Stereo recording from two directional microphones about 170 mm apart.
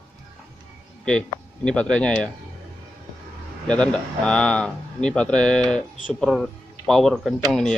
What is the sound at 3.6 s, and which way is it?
A man's voice, 5° left (ahead or behind).